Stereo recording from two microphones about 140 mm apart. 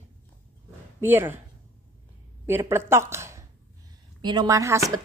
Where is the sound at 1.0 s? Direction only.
15° right (ahead or behind).